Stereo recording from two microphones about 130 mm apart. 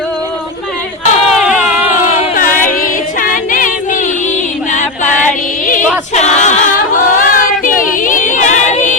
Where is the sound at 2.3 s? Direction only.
90° left; by 5.4 s 75° left (ahead or behind).